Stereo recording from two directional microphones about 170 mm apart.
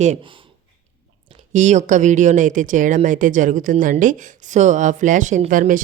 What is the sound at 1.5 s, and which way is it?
A woman's voice, 45° right (ahead or behind).